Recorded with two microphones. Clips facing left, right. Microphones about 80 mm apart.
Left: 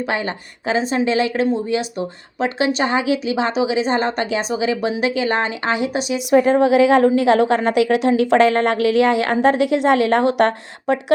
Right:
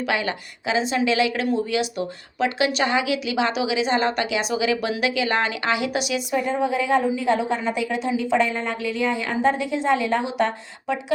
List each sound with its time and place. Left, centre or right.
0.0 s a woman's voice: left
6.3 s a woman's voice: left